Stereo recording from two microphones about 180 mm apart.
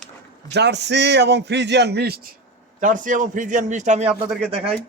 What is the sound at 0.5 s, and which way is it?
A man's voice, 70° right (ahead or behind).